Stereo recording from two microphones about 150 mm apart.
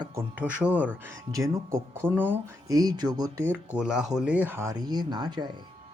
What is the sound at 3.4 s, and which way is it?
Speech, 5° right (ahead or behind).